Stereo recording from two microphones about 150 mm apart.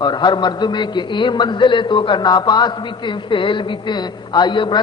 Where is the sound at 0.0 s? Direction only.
30° left (ahead or behind).